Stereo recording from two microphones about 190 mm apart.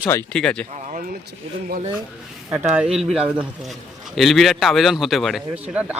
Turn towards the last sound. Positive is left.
turn(degrees=-10)  # may be behind; listen again after turning